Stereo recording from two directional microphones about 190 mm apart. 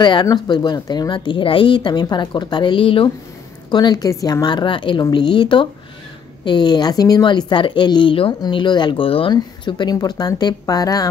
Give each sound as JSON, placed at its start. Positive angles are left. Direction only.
{"t": 0.0, "sound": "speech", "side_deg": 25}